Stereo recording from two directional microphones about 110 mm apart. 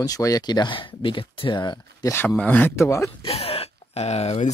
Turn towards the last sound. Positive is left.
turn(degrees=75)  # may be behind; listen again after turning